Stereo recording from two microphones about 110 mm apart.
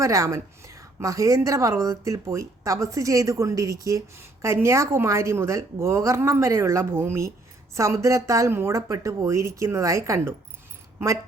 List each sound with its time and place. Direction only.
0.0 s a woman's voice: 30° right (ahead or behind)